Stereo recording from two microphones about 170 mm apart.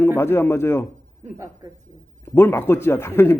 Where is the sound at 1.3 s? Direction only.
15° right (ahead or behind).